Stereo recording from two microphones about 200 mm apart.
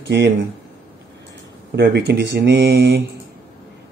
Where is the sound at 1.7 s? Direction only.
55° right (ahead or behind).